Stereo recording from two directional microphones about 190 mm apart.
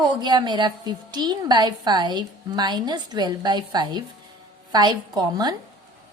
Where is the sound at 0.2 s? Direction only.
20° right (ahead or behind).